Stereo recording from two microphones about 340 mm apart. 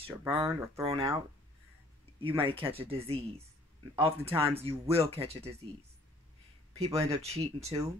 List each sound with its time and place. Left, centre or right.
0.0 s speech: centre
2.2 s speech: centre
6.8 s speech: centre